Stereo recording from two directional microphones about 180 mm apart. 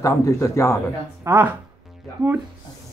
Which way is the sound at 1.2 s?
10° right (ahead or behind).